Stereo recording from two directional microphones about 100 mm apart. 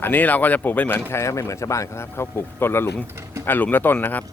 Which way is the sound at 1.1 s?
30° left (ahead or behind).